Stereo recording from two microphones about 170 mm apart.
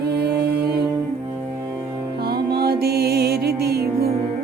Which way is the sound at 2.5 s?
70° right (ahead or behind).